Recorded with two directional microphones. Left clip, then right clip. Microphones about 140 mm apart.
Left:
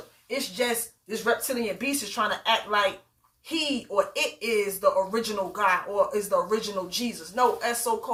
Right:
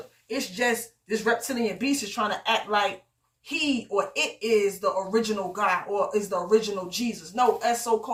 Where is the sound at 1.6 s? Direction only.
25° left (ahead or behind).